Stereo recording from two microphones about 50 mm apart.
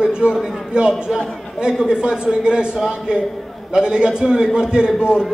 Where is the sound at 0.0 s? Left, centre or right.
Centre.